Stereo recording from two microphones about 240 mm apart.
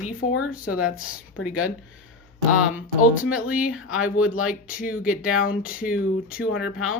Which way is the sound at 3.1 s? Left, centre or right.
Centre.